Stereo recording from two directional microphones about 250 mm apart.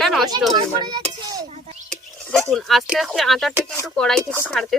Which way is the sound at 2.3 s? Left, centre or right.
Centre.